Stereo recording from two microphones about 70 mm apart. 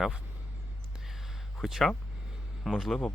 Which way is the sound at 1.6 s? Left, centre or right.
Centre.